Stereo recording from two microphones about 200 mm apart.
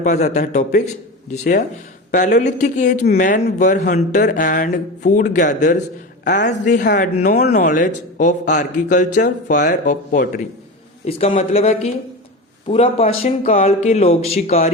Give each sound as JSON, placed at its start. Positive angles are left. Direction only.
{"t": 0.0, "sound": "speech", "side_deg": 35}
{"t": 6.2, "sound": "a woman's voice", "side_deg": 60}
{"t": 6.5, "sound": "speech", "side_deg": 40}